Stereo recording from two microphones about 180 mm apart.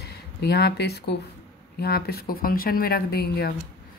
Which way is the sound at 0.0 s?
65° left (ahead or behind).